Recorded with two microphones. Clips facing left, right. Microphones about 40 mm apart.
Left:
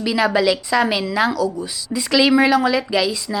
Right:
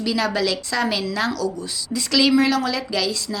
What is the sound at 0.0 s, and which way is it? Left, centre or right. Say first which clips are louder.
A woman's voice: left 4 dB; centre.